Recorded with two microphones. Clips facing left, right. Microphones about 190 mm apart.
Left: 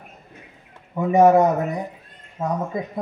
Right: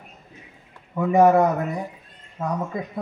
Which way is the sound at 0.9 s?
20° left (ahead or behind).